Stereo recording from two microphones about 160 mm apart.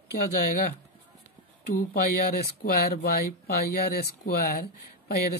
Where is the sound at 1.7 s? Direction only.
75° left (ahead or behind).